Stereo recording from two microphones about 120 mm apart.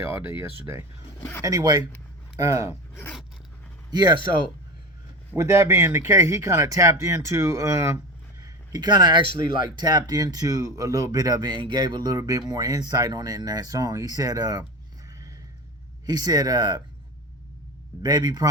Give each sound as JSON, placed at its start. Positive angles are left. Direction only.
{"t": 0.1, "sound": "speech", "side_deg": -20}
{"t": 1.4, "sound": "speech", "side_deg": -30}
{"t": 3.9, "sound": "speech", "side_deg": -40}
{"t": 5.4, "sound": "speech", "side_deg": -20}
{"t": 16.0, "sound": "speech", "side_deg": -35}
{"t": 18.0, "sound": "speech", "side_deg": -35}